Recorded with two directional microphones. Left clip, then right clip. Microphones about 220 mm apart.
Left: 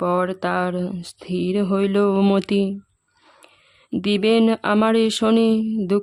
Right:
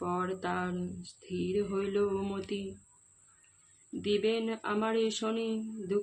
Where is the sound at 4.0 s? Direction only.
50° left (ahead or behind).